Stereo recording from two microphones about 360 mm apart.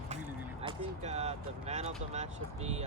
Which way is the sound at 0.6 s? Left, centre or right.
Centre.